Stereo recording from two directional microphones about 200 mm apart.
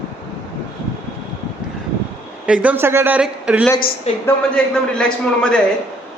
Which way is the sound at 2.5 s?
5° right (ahead or behind).